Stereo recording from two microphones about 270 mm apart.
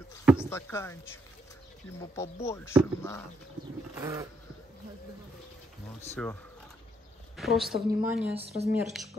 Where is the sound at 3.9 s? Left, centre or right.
Centre.